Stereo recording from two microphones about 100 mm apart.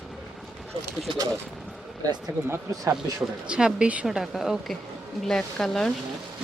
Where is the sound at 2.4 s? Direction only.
25° right (ahead or behind).